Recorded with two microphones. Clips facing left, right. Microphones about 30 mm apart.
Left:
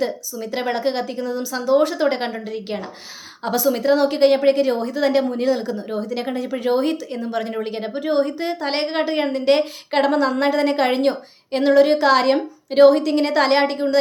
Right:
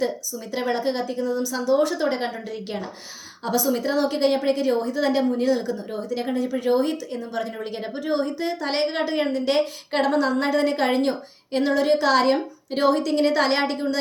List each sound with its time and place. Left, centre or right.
0.0 s a woman's voice: left
7.5 s a woman's voice: left
8.6 s a woman's voice: left